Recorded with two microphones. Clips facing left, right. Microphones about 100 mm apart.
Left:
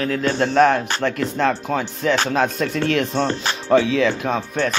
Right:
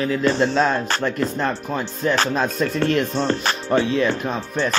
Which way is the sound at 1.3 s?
90° left.